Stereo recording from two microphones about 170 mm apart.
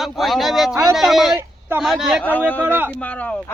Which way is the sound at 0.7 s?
15° right (ahead or behind).